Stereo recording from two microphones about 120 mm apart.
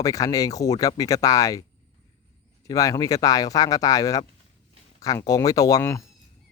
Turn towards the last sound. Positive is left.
turn(degrees=30)  # may be behind; listen again after turning